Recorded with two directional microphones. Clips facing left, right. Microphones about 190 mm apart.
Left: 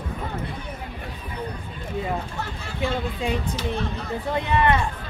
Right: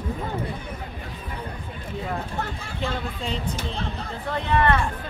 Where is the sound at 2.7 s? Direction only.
15° left (ahead or behind).